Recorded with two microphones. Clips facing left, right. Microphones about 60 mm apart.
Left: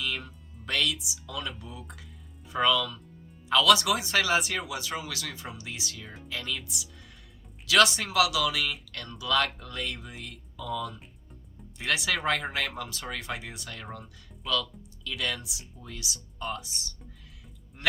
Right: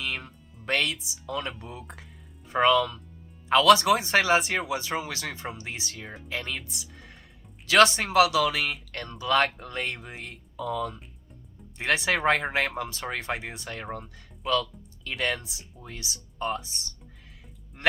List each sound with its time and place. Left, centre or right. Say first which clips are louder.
0.6 s speech: right 2 dB; right